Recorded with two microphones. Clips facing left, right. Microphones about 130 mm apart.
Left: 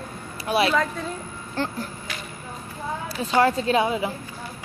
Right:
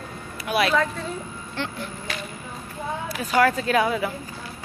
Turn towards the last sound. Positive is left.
turn(degrees=25)  # may be behind; listen again after turning